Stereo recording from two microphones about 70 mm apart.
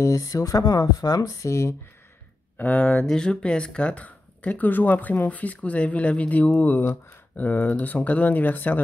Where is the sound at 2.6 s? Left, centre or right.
Left.